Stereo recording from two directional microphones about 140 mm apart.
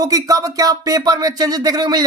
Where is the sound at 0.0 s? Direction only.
25° right (ahead or behind).